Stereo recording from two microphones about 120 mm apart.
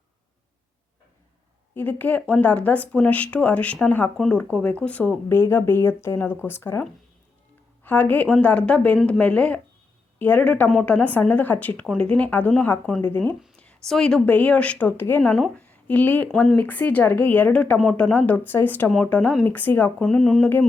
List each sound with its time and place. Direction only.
1.7 s speech: 15° left (ahead or behind)
7.9 s speech: 15° left (ahead or behind)
20.1 s mantra: 5° left (ahead or behind)